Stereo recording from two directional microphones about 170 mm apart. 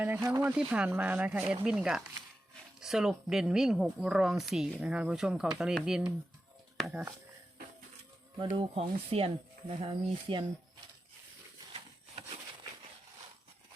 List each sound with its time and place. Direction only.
0.0 s a woman's voice: 10° right (ahead or behind)
8.4 s speech: 30° right (ahead or behind)